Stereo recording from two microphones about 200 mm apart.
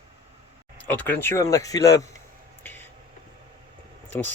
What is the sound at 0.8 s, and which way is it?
Speech, 10° left (ahead or behind).